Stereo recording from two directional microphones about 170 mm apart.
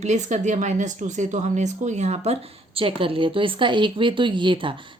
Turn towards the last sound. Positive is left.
turn(degrees=-30)  # may be behind; listen again after turning